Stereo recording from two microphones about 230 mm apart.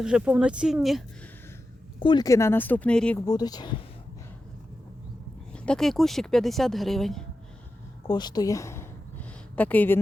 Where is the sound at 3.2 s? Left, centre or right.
Centre.